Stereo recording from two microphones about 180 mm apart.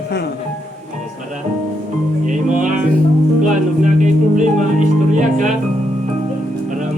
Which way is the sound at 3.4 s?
45° right (ahead or behind).